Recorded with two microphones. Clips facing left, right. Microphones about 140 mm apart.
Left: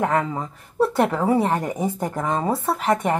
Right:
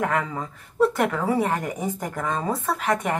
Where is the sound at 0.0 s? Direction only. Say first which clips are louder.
Left 3 dB; 30° left (ahead or behind).